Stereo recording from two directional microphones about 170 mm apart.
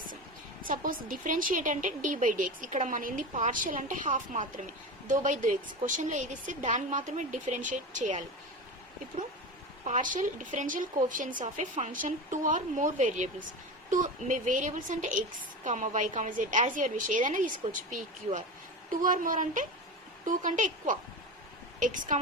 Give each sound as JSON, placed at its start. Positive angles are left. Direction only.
{"t": 0.6, "sound": "a woman's voice", "side_deg": -55}
{"t": 9.8, "sound": "a woman's voice", "side_deg": -50}